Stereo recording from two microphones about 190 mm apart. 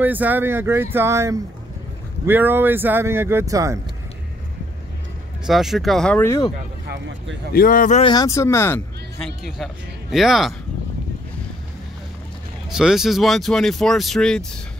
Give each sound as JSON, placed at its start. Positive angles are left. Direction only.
{"t": 0.0, "sound": "speech", "side_deg": -10}
{"t": 5.5, "sound": "speech", "side_deg": 0}
{"t": 6.9, "sound": "speech", "side_deg": -65}
{"t": 7.5, "sound": "a man's voice", "side_deg": 45}
{"t": 8.0, "sound": "speech", "side_deg": 20}
{"t": 10.1, "sound": "speech", "side_deg": 0}
{"t": 12.6, "sound": "speech", "side_deg": 0}